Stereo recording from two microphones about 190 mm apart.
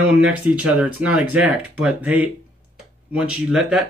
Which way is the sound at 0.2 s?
5° right (ahead or behind).